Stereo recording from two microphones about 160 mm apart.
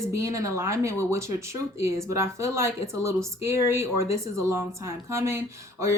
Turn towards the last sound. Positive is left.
turn(degrees=-20)  # may be behind; listen again after turning